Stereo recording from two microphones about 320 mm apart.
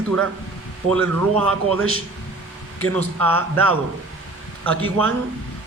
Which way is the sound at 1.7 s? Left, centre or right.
Right.